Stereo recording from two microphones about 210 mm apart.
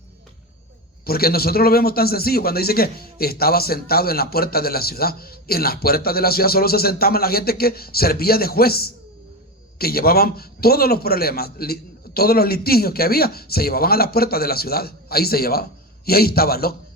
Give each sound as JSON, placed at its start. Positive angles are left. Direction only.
{"t": 1.0, "sound": "a man's voice", "side_deg": 45}